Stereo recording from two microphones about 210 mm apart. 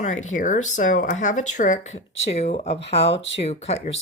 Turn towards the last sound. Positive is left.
turn(degrees=30)  # may be behind; listen again after turning